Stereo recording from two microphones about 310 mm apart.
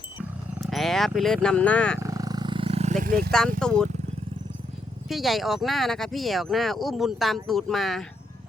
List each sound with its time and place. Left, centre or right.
0.2 s roaring cats: centre
2.0 s roar: centre; by 3.3 s right
3.6 s speech: centre
5.0 s speech: centre